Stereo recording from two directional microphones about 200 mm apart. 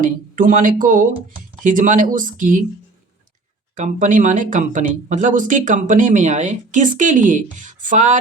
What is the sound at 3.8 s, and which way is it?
Speech, 40° right (ahead or behind).